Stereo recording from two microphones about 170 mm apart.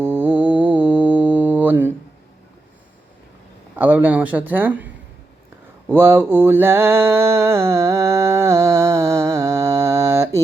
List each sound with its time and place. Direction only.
0.0 s mantra: 10° right (ahead or behind)
3.8 s speech: 10° right (ahead or behind)
5.9 s mantra: 10° right (ahead or behind)